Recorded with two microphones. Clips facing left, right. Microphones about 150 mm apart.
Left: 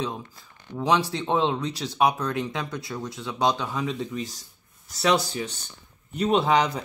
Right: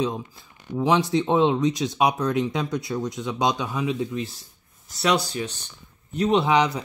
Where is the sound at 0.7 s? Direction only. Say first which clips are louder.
Right 2 dB; 15° right (ahead or behind).